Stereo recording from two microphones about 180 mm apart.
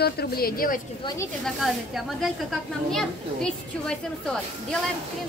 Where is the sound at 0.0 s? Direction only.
60° left (ahead or behind).